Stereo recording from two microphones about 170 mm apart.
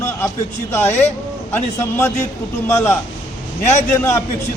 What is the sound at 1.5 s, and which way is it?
Speech, 15° left (ahead or behind).